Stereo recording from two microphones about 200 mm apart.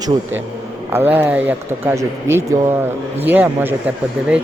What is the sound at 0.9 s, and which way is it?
Speech, 10° right (ahead or behind).